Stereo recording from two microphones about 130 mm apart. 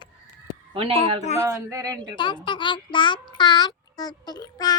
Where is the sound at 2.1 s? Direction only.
35° left (ahead or behind).